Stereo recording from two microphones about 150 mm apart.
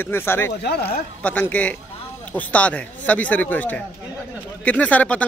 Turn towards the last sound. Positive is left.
turn(degrees=10)  # may be behind; listen again after turning